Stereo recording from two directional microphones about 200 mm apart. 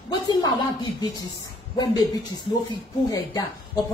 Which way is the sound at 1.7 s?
20° left (ahead or behind).